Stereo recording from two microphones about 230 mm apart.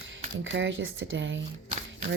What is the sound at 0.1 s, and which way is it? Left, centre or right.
Speech, right.